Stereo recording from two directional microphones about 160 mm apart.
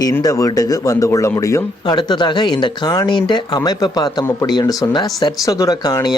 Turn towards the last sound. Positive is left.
turn(degrees=20)  # may be behind; listen again after turning